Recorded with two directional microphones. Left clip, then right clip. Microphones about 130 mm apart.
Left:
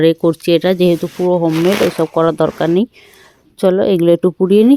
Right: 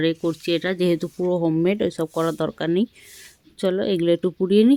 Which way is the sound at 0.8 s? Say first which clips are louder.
Left 8 dB; 15° left (ahead or behind).